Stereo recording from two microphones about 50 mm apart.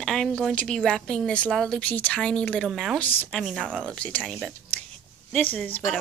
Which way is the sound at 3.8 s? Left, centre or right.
Left.